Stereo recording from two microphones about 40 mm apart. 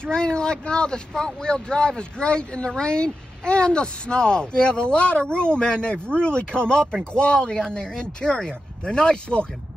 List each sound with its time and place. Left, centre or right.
0.0 s speech: left